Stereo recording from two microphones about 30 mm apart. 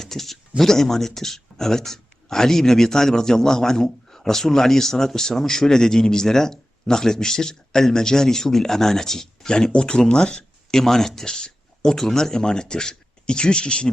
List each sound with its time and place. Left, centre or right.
0.0 s speech: centre
9.5 s speech: left
10.7 s speech: centre; by 13.9 s left